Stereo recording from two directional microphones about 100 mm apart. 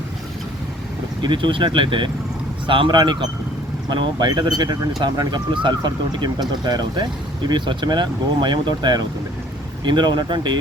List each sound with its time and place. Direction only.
1.2 s speech: 50° right (ahead or behind)